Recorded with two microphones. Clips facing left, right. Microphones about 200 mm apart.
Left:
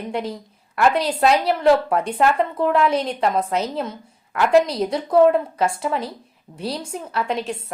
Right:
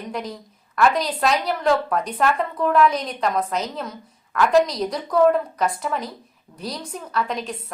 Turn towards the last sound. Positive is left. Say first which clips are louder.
# left 2 dB
turn(degrees=30)  # may be behind; listen again after turning